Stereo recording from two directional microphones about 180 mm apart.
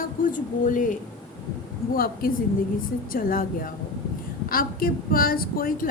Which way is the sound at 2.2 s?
55° left (ahead or behind).